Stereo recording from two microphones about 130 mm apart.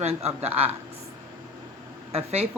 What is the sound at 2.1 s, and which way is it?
Speech, 55° right (ahead or behind).